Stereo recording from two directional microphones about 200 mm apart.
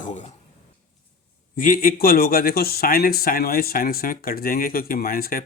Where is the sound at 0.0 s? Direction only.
35° left (ahead or behind).